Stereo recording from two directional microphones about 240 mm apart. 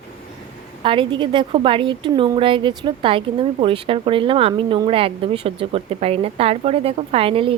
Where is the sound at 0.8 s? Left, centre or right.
Right.